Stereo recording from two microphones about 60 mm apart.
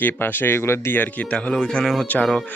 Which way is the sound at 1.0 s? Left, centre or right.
Left.